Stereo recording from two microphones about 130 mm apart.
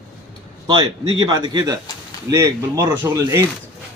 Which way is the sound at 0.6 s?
35° right (ahead or behind).